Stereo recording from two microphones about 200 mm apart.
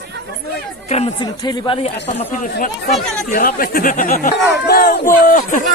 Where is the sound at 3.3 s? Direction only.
45° left (ahead or behind).